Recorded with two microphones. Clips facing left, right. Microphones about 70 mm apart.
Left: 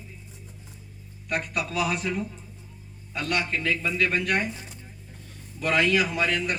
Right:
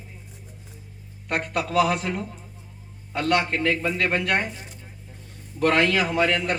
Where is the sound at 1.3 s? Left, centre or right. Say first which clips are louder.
Right 3 dB; right.